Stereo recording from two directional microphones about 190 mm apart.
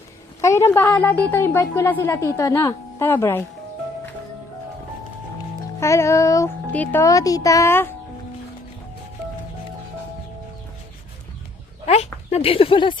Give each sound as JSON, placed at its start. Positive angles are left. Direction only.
{"t": 0.4, "sound": "a woman's voice", "side_deg": 15}
{"t": 5.8, "sound": "a woman's voice", "side_deg": 15}
{"t": 11.9, "sound": "speech", "side_deg": 35}